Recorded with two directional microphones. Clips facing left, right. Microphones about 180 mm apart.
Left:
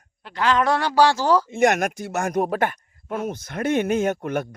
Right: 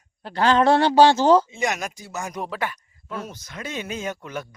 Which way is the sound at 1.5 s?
55° left (ahead or behind).